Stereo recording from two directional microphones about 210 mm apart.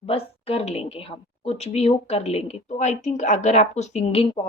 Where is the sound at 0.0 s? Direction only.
30° left (ahead or behind).